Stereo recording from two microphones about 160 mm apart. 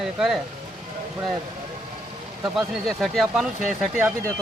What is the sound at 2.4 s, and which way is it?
Speech, centre (ahead or behind).